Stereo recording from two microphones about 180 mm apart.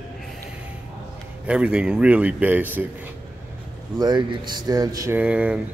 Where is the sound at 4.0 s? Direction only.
25° right (ahead or behind).